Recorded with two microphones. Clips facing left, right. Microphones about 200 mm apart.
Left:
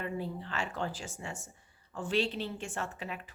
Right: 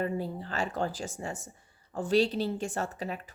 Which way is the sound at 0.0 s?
40° right (ahead or behind).